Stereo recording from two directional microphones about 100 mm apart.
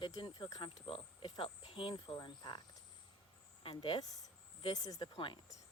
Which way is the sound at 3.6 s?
55° left (ahead or behind).